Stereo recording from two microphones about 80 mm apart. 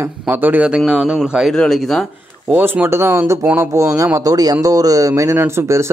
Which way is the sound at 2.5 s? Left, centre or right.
Right.